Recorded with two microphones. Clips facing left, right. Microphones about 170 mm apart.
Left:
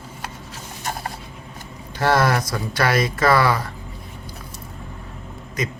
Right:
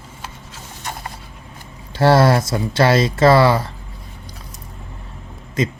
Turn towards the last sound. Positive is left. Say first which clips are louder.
# right 6 dB
turn(degrees=-25)  # may be behind; listen again after turning